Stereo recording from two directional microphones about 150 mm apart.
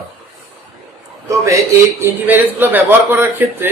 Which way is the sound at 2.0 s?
10° right (ahead or behind).